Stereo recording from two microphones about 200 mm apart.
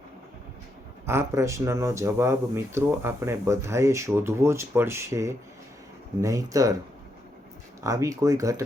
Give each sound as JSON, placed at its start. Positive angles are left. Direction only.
{"t": 1.0, "sound": "speech", "side_deg": -15}
{"t": 7.8, "sound": "speech", "side_deg": -15}